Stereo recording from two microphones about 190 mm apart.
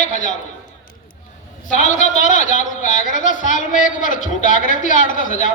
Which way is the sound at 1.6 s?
40° left (ahead or behind).